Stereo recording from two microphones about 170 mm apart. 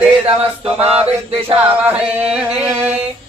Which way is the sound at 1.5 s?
10° right (ahead or behind).